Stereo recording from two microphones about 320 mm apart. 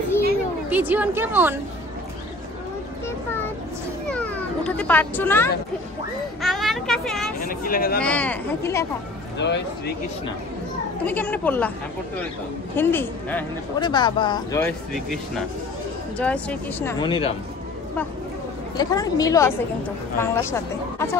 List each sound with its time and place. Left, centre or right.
0.7 s speech: centre
4.1 s cat: centre
6.4 s speech: centre
7.4 s speech: left
8.0 s speech: centre
9.4 s speech: left
11.1 s speech: centre
12.7 s speech: centre
16.2 s speech: centre
18.8 s speech: centre